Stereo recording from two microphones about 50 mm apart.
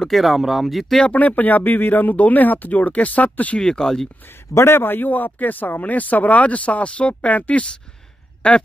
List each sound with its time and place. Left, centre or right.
0.1 s speech: centre
1.0 s speech: left
3.5 s speech: centre
4.6 s speech: left